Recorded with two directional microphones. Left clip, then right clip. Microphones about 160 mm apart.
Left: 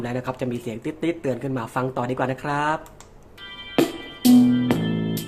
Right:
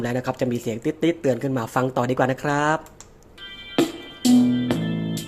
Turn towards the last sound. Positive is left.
turn(degrees=0)  # may be behind; listen again after turning